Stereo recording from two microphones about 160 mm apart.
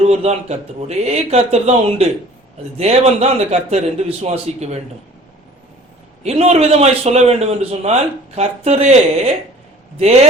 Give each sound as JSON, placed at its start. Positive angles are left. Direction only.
{"t": 0.0, "sound": "a man's voice", "side_deg": -40}
{"t": 6.2, "sound": "a man's voice", "side_deg": -40}